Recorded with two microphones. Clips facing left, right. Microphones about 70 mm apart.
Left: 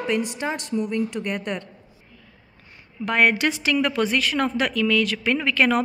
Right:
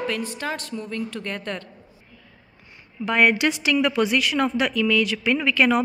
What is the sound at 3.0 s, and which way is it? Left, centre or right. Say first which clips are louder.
A woman's voice: right 1 dB; left.